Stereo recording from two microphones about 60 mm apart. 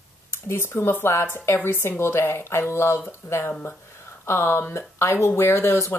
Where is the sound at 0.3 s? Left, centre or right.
Left.